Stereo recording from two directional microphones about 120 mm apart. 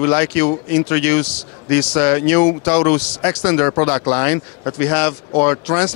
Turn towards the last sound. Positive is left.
turn(degrees=25)  # may be behind; listen again after turning